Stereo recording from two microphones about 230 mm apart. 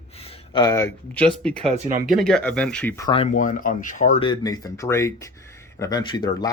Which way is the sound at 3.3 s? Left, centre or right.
Left.